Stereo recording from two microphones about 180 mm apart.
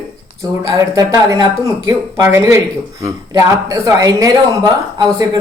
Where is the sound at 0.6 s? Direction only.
20° right (ahead or behind).